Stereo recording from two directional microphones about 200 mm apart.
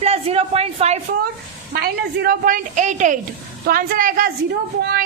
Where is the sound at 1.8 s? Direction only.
50° right (ahead or behind).